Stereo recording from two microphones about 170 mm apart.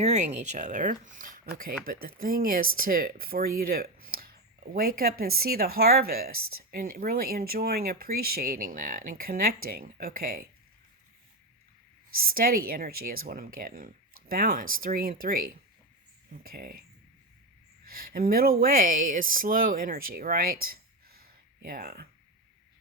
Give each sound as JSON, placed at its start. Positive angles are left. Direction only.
{"t": 0.0, "sound": "speech", "side_deg": -40}
{"t": 12.2, "sound": "speech", "side_deg": -60}
{"t": 17.8, "sound": "speech", "side_deg": -60}